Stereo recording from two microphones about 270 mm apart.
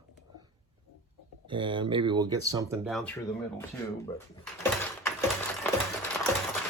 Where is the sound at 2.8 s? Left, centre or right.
Centre.